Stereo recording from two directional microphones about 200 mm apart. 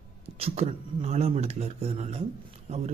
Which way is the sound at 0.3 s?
30° right (ahead or behind).